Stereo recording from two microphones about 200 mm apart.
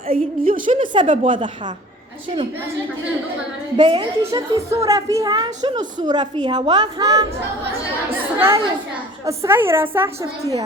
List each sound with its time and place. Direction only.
0.1 s a woman's voice: 45° right (ahead or behind)
0.8 s a child's voice: 25° right (ahead or behind)
3.8 s a child's voice: 20° right (ahead or behind)
8.4 s a woman's voice: 15° right (ahead or behind)